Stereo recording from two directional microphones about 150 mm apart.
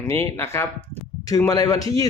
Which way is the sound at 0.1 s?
15° left (ahead or behind).